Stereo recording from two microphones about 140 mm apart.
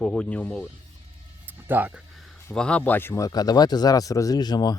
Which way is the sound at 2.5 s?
5° left (ahead or behind).